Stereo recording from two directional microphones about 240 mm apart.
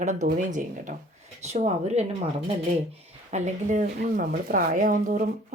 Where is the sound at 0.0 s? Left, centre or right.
Right.